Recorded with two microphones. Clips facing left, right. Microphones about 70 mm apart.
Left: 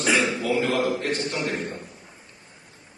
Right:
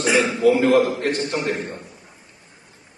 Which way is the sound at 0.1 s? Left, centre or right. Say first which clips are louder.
Right 6 dB; right.